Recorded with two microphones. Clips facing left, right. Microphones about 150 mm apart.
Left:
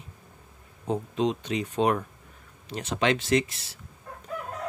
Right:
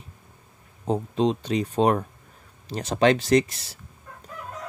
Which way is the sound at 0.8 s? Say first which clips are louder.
Right 3 dB; 35° right (ahead or behind).